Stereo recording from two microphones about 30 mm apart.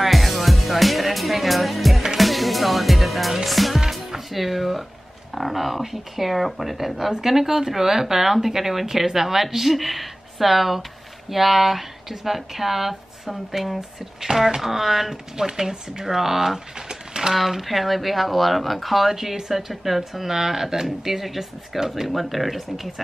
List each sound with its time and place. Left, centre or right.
0.0 s music: centre
5.3 s speech: centre
15.3 s speech: centre
21.7 s speech: centre
22.1 s speech: centre